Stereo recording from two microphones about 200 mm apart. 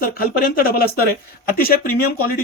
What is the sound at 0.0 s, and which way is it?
Speech, 50° left (ahead or behind).